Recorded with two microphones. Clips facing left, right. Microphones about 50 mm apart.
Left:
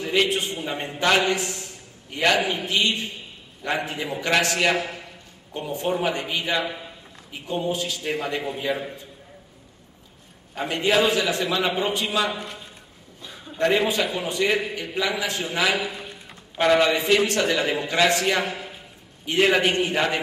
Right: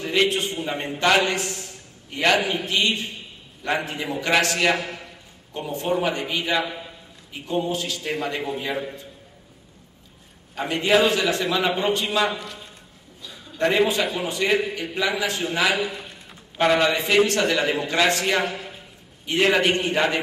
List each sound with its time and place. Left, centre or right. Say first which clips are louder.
0.0 s a man's voice: right 1 dB; centre
1.3 s a sound: left 1 dB; centre
2.6 s a man's voice: even; centre
10.5 s a man's voice: right 2 dB; centre
13.3 s a sound: left 3 dB; left
13.6 s a man's voice: right 1 dB; centre